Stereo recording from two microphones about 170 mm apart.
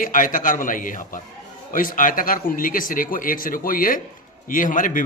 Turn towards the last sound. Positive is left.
turn(degrees=50)  # may be behind; listen again after turning